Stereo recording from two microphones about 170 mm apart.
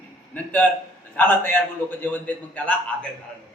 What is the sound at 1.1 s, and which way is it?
A man's voice, 10° left (ahead or behind).